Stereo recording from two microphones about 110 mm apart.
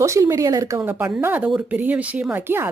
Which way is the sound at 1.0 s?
15° right (ahead or behind).